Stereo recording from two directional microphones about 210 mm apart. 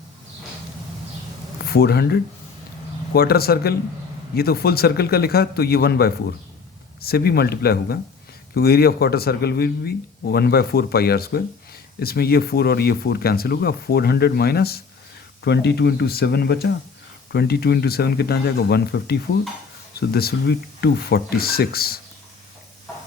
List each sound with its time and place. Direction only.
1.6 s speech: 50° left (ahead or behind)